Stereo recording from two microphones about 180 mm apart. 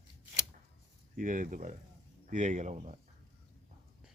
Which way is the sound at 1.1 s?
50° right (ahead or behind).